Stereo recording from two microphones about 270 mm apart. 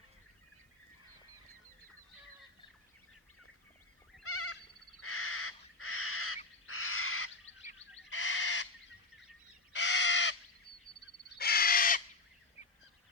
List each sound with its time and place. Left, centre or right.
4.2 s goat: left
4.9 s crow: left
8.1 s bird: left
9.7 s crow: left